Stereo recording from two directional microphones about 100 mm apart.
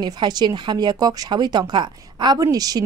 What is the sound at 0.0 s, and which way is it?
A woman's voice, 45° right (ahead or behind).